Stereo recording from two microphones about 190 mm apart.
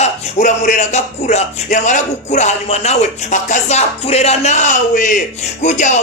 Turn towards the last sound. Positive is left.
turn(degrees=40)  # may be behind; listen again after turning